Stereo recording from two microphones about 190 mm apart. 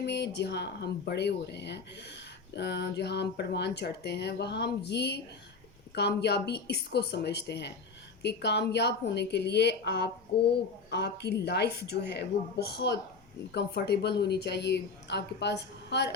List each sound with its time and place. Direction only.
0.0 s speech: 60° left (ahead or behind)